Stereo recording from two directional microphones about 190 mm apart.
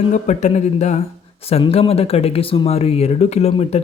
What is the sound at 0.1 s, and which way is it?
Speech, 40° left (ahead or behind).